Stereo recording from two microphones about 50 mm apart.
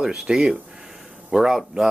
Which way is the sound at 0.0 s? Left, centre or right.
Centre.